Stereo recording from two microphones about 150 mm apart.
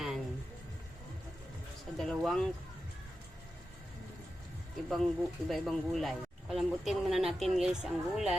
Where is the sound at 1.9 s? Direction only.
Centre (ahead or behind).